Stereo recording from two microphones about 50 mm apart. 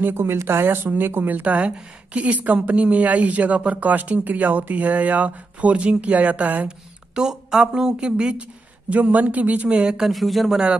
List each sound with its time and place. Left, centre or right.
0.1 s speech: right
7.2 s speech: centre
10.0 s speech: centre